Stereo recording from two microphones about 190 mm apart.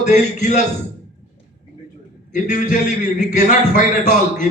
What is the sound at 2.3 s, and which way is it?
A man's voice, 40° left (ahead or behind).